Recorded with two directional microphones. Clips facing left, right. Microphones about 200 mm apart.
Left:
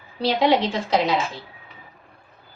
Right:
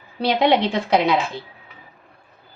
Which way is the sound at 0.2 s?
60° right (ahead or behind).